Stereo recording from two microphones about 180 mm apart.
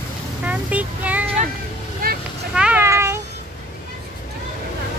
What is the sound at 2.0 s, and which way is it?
Vehicle, 55° right (ahead or behind).